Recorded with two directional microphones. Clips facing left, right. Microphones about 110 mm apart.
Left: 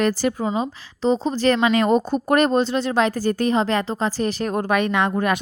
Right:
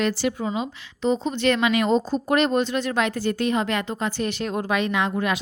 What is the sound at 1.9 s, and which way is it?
Speech, 55° left (ahead or behind).